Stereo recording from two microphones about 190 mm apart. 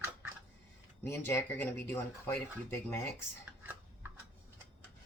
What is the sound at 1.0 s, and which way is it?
Speech, 10° left (ahead or behind).